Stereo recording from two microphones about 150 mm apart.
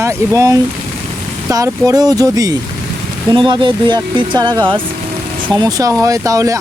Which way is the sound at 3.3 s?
35° right (ahead or behind).